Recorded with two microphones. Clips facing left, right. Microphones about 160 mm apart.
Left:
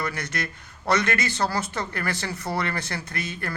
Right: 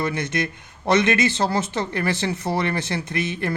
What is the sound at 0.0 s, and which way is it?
Speech, 25° right (ahead or behind).